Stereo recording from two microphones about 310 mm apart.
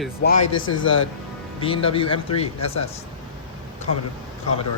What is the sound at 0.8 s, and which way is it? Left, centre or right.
Speech, left.